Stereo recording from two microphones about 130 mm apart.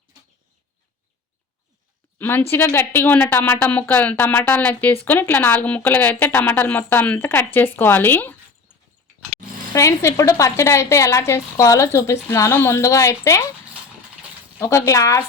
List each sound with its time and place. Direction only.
2.1 s a woman's voice: 15° left (ahead or behind)
9.7 s a woman's voice: 20° left (ahead or behind)
14.6 s a woman's voice: 25° left (ahead or behind)